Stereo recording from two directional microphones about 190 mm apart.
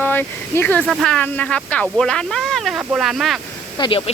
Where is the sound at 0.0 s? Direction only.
10° left (ahead or behind).